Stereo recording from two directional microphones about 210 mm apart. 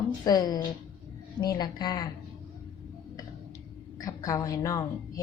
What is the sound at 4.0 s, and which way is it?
Speech, 15° left (ahead or behind).